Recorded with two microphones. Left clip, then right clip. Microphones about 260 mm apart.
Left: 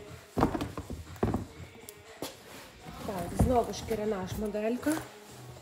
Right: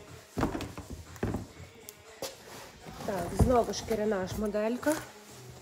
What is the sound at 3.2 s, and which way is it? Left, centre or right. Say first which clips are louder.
Speech: right 1 dB; right.